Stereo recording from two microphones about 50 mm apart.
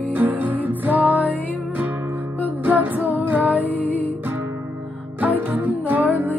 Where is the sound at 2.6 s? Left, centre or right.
Right.